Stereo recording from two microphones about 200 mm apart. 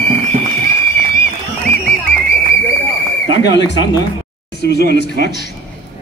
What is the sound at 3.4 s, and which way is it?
Speech, 60° left (ahead or behind).